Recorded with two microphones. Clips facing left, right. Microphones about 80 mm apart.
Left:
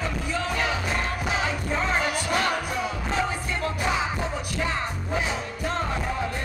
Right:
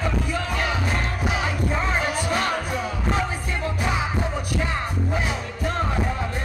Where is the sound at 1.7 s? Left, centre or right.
Centre.